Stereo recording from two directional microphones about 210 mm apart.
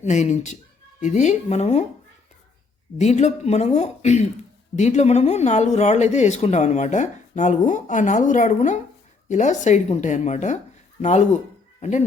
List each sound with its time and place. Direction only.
0.0 s speech: 35° left (ahead or behind)
3.0 s speech: 35° left (ahead or behind)
11.8 s speech: 35° left (ahead or behind)